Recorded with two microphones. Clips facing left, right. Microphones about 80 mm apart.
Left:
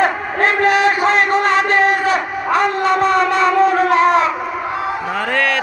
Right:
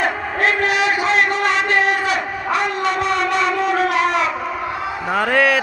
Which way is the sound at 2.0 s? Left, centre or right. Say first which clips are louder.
Left 4 dB; left.